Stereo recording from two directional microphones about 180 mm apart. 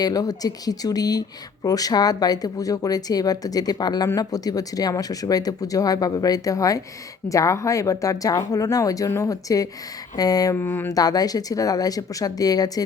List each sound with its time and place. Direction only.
0.0 s speech: 20° left (ahead or behind)